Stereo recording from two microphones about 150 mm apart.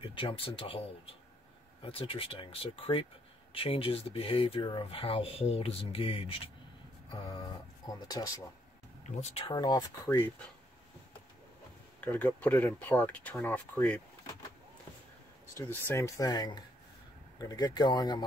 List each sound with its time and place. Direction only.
0.1 s speech: 35° left (ahead or behind)
9.1 s speech: 50° left (ahead or behind)
9.5 s speech: 25° left (ahead or behind)
12.0 s speech: 10° left (ahead or behind)
15.5 s speech: 20° left (ahead or behind)